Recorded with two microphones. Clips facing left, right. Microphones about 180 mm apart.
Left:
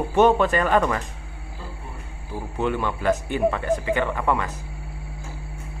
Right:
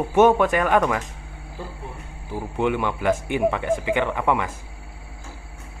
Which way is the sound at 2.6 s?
20° right (ahead or behind).